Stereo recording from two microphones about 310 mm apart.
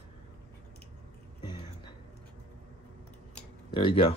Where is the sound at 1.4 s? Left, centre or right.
Centre.